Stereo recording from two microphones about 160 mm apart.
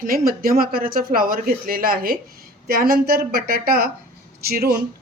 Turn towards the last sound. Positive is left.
turn(degrees=-70)  # may be behind; listen again after turning